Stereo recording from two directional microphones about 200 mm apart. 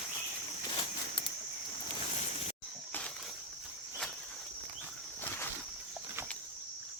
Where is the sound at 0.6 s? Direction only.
25° left (ahead or behind).